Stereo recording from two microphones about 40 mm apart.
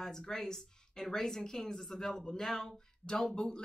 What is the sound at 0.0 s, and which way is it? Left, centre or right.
Speech, centre.